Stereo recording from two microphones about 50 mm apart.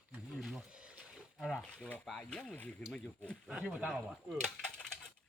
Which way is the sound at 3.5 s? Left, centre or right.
Centre.